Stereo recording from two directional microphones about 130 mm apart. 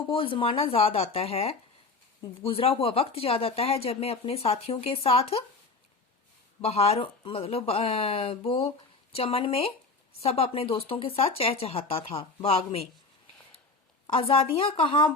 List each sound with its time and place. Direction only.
0.0 s speech: 45° left (ahead or behind)
6.6 s speech: 50° left (ahead or behind)
14.1 s speech: 45° left (ahead or behind)